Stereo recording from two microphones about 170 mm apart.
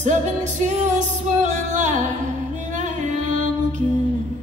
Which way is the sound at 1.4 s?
45° right (ahead or behind).